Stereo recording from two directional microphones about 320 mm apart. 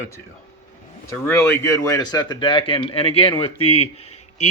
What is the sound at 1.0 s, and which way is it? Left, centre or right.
Speech, centre.